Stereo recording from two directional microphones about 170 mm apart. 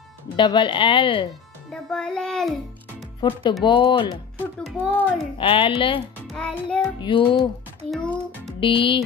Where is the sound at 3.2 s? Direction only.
25° left (ahead or behind).